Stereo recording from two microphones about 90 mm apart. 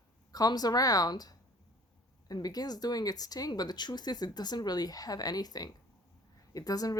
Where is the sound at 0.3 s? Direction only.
45° left (ahead or behind).